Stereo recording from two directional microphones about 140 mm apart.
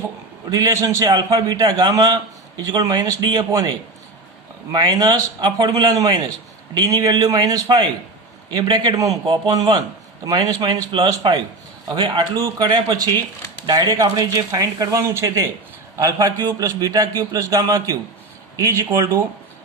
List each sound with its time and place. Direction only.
0.5 s a man's voice: 25° right (ahead or behind)